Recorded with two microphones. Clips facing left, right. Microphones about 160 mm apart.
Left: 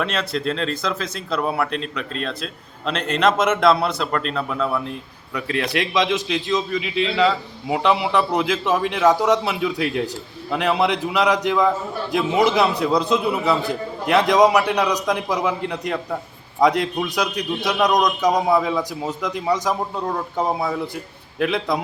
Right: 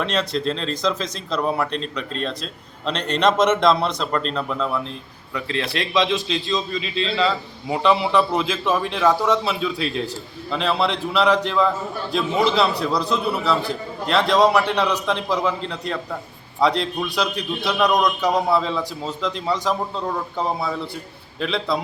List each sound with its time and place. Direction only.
0.0 s a man's voice: 5° left (ahead or behind)
0.4 s speech: 30° right (ahead or behind)
0.8 s a man's voice: 5° left (ahead or behind)
5.7 s a man's voice: 15° left (ahead or behind)